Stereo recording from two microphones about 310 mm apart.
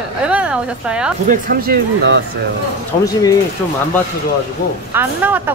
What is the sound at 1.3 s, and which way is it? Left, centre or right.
Speech, right.